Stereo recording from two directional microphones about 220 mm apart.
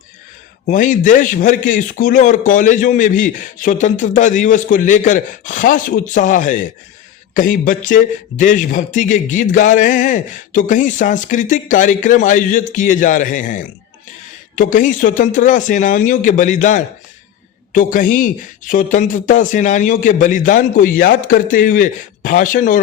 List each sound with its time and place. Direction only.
0.7 s a man's voice: 35° left (ahead or behind)